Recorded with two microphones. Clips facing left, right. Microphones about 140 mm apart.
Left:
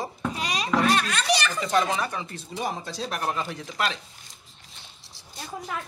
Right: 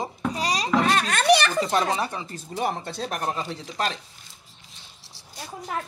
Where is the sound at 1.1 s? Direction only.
55° right (ahead or behind).